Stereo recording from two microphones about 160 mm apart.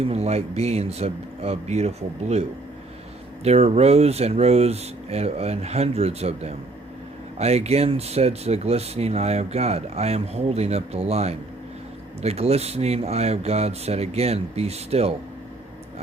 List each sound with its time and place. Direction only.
0.0 s speech: 40° right (ahead or behind)
3.4 s speech: 40° right (ahead or behind)